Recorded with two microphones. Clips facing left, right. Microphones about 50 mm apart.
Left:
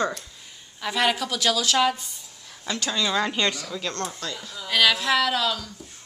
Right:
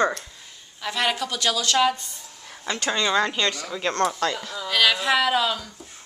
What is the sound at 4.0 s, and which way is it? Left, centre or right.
Speech, right.